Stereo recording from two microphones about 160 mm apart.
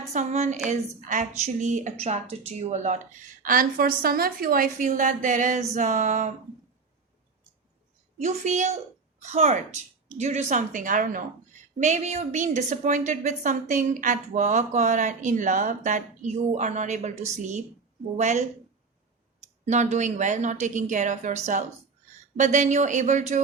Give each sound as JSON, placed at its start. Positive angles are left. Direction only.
{"t": 0.1, "sound": "a woman's voice", "side_deg": -45}
{"t": 3.4, "sound": "a woman's voice", "side_deg": -60}
{"t": 8.2, "sound": "a woman's voice", "side_deg": -50}
{"t": 19.6, "sound": "a woman's voice", "side_deg": -45}